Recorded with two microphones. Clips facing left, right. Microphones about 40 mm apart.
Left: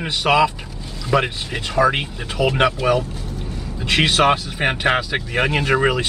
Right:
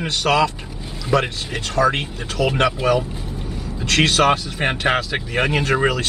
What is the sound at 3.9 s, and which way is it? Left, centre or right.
Speech, centre.